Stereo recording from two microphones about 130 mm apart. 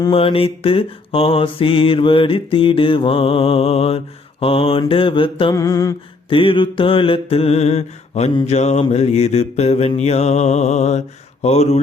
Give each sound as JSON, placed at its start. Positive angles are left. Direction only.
{"t": 0.1, "sound": "mantra", "side_deg": 45}
{"t": 5.5, "sound": "mantra", "side_deg": 25}
{"t": 6.3, "sound": "mantra", "side_deg": 40}